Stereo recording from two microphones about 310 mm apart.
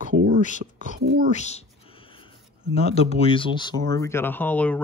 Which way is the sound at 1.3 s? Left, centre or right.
Left.